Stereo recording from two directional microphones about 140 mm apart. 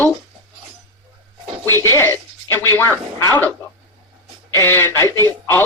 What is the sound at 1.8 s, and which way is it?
Speech, 20° left (ahead or behind).